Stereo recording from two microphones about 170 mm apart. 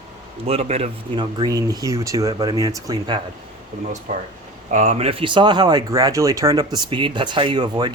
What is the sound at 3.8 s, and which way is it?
Speech, 45° right (ahead or behind).